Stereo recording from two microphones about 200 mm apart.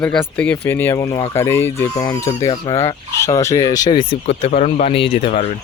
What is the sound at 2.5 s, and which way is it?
Speech, 30° left (ahead or behind).